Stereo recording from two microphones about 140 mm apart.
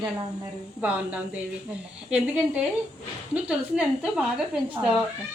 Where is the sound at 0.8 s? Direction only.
10° right (ahead or behind).